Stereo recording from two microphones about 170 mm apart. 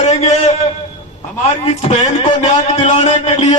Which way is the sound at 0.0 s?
40° left (ahead or behind).